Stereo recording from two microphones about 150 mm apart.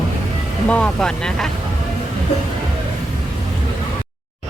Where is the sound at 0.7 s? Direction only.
5° left (ahead or behind).